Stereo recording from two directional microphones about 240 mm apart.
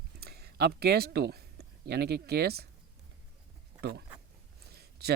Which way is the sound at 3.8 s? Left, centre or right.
Right.